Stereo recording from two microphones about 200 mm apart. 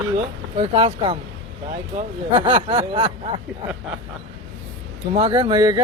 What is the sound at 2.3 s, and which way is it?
Speech, 25° right (ahead or behind).